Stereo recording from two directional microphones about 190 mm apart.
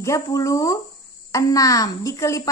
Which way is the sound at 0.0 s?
15° left (ahead or behind).